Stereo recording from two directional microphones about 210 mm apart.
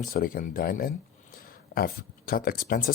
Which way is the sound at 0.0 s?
45° left (ahead or behind).